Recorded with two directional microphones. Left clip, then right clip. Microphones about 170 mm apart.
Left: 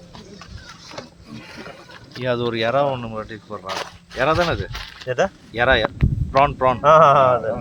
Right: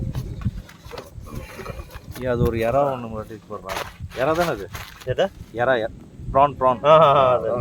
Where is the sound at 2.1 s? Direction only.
10° right (ahead or behind); by 3.6 s 15° left (ahead or behind).